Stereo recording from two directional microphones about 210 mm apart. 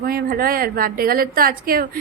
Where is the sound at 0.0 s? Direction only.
45° right (ahead or behind).